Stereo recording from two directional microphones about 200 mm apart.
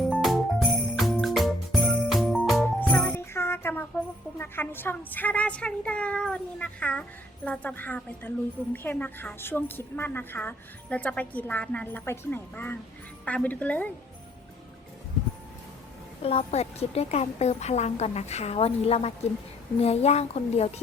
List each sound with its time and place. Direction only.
0.1 s music: centre (ahead or behind)
4.4 s a woman's voice: 10° left (ahead or behind)
16.2 s a woman's voice: 30° left (ahead or behind)